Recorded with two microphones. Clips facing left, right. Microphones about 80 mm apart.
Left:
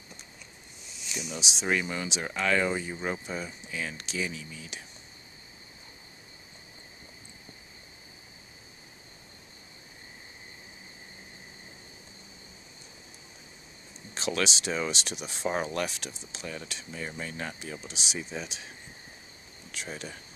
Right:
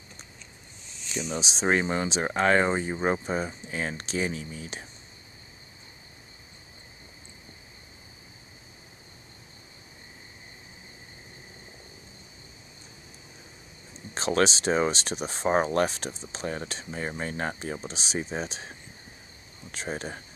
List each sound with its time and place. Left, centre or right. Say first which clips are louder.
1.3 s speech: right 4 dB; right
14.1 s speech: right 6 dB; right